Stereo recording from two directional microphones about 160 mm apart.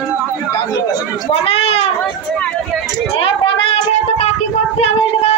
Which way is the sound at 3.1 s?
35° left (ahead or behind).